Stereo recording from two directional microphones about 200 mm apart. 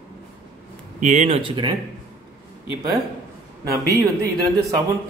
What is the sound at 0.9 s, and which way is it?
Speech, 40° right (ahead or behind).